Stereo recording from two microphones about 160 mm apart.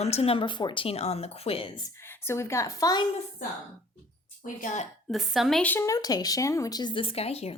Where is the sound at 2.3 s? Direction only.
15° left (ahead or behind).